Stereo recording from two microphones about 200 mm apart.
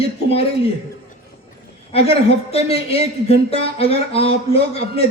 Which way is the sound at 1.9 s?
30° left (ahead or behind).